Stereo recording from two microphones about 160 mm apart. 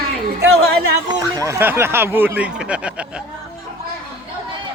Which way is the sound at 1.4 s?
15° right (ahead or behind).